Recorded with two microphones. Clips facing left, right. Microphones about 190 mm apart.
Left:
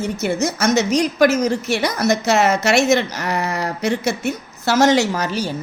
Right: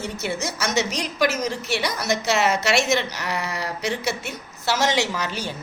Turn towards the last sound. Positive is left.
turn(degrees=40)  # may be behind; listen again after turning